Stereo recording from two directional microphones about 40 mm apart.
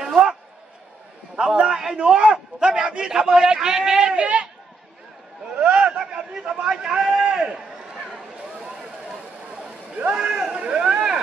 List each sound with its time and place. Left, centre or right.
0.0 s a sound: centre
1.4 s a man's voice: centre
4.2 s a man's voice: right
5.5 s a man's voice: right
10.1 s a man's voice: centre
10.5 s a sound: right